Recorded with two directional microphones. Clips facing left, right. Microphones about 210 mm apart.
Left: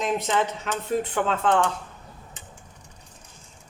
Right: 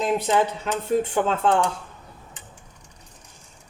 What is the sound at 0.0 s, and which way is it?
Speech, 30° right (ahead or behind).